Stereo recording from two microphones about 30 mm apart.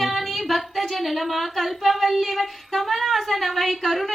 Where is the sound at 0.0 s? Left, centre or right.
Centre.